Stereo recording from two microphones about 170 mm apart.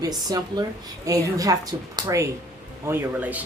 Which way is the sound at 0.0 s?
20° right (ahead or behind).